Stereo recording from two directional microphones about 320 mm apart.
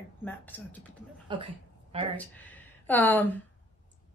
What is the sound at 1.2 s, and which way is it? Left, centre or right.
Speech, centre.